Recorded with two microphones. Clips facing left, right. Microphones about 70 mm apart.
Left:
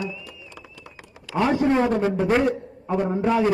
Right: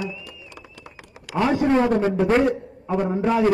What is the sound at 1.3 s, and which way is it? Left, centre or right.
Speech, right.